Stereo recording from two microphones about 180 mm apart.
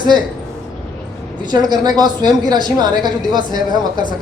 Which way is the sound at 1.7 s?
20° right (ahead or behind).